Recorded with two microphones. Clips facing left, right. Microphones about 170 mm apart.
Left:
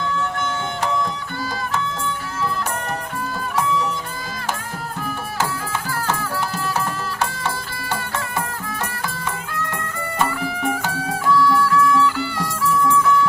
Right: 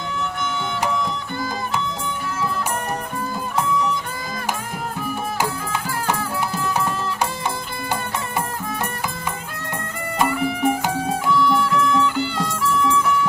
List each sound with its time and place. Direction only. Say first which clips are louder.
10.2 s music: right 3 dB; 20° right (ahead or behind)